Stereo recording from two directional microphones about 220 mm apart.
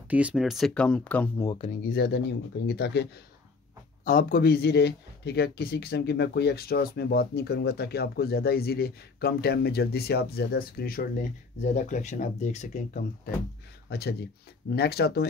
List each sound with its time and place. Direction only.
0.1 s speech: 5° right (ahead or behind)
1.4 s speech: 20° left (ahead or behind)
1.8 s speech: 45° left (ahead or behind)
4.0 s speech: 40° left (ahead or behind)
13.8 s speech: 45° left (ahead or behind)